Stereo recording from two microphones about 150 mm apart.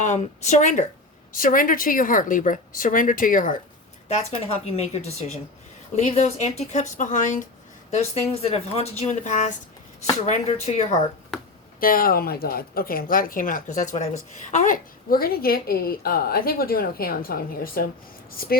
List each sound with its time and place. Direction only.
0.0 s speech: 50° left (ahead or behind)
4.1 s speech: 45° left (ahead or behind)
7.9 s speech: 45° left (ahead or behind)
11.8 s a woman's voice: 70° left (ahead or behind)